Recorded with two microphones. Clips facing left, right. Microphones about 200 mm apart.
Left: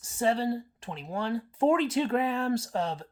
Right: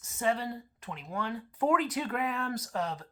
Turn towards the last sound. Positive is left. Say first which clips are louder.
# left 3 dB
turn(degrees=30)  # may be behind; listen again after turning